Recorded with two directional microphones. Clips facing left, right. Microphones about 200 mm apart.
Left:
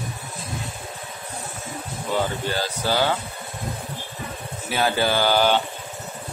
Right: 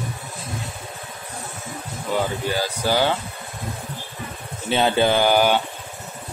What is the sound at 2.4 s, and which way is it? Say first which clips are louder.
Speech: right 2 dB; 10° right (ahead or behind).